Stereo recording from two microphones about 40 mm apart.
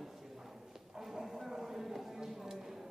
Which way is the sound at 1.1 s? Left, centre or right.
Centre.